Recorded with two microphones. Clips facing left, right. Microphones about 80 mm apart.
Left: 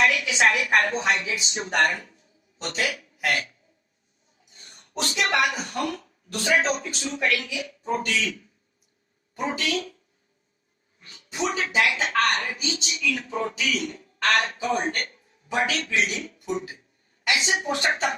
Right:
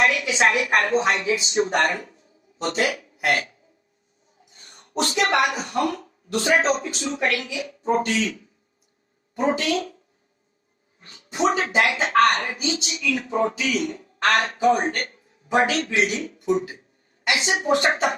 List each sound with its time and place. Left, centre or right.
0.0 s a woman's voice: right
4.5 s a woman's voice: right
11.0 s a woman's voice: right